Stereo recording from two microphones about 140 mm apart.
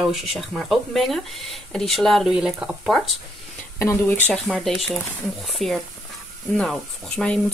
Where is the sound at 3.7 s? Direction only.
20° left (ahead or behind).